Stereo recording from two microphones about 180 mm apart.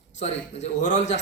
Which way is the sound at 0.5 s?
40° left (ahead or behind).